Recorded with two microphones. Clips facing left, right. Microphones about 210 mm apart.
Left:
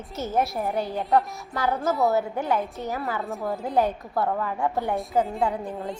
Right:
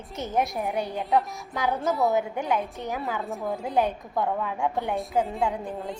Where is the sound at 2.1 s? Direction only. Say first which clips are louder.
Left 1 dB; 15° right (ahead or behind).